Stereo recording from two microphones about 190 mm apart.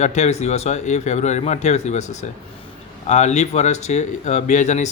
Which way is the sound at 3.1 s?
35° left (ahead or behind).